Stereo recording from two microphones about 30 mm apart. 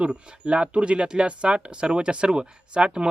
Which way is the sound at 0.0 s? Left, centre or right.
Right.